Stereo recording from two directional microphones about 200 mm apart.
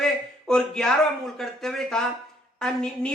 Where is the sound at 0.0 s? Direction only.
5° left (ahead or behind).